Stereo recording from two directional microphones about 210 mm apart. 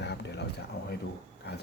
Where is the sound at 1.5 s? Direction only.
50° left (ahead or behind).